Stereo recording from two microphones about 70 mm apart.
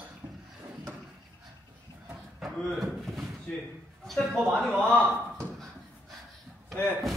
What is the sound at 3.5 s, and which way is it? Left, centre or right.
A man's voice, centre.